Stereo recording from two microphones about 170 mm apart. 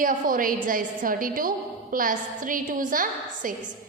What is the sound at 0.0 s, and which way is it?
A woman's voice, 55° right (ahead or behind).